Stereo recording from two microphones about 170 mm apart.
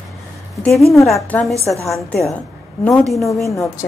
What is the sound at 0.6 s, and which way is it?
A woman's voice, 5° left (ahead or behind).